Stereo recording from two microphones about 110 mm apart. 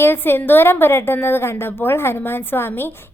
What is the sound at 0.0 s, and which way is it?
A woman's voice, 20° left (ahead or behind).